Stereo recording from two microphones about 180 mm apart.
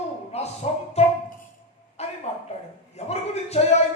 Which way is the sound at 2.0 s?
35° left (ahead or behind).